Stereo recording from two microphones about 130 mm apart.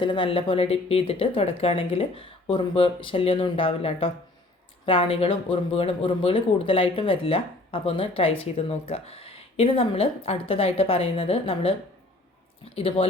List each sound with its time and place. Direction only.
0.0 s speech: 40° left (ahead or behind)
12.7 s speech: 45° left (ahead or behind)